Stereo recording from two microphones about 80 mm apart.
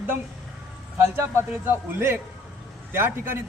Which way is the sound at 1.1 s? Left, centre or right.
Right.